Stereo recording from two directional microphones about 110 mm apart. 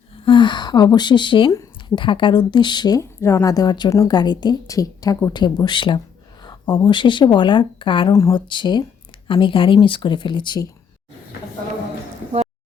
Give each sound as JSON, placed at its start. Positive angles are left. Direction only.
{"t": 0.3, "sound": "speech", "side_deg": 45}
{"t": 3.0, "sound": "a woman's voice", "side_deg": 25}
{"t": 8.1, "sound": "a woman's voice", "side_deg": 30}
{"t": 8.4, "sound": "speech", "side_deg": 45}